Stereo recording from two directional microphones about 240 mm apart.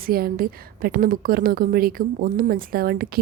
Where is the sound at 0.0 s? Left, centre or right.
Right.